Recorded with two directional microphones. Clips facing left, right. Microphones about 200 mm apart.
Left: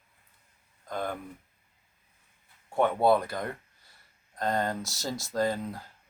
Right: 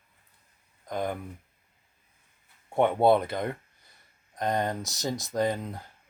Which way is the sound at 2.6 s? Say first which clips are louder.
Right 2 dB; 20° right (ahead or behind).